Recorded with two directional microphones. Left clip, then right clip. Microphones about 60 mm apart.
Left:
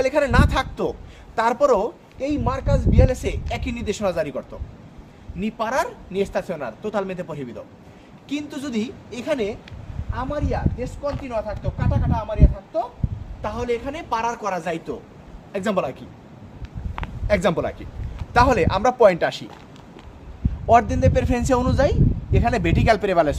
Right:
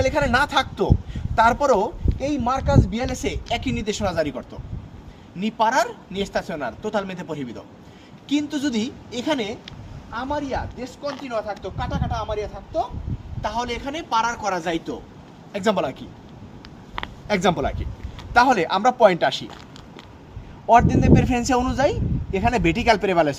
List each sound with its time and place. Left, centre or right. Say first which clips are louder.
0.0 s speech: even; left
1.1 s speech: right 4 dB; centre
2.6 s a woman's voice: left 1 dB; left
5.4 s a woman's voice: right 3 dB; left
8.3 s a woman's voice: right 5 dB; left
17.2 s a woman's voice: left 1 dB; left
20.7 s a man's voice: even; left
21.1 s speech: right 3 dB; centre
21.3 s speech: left 1 dB; centre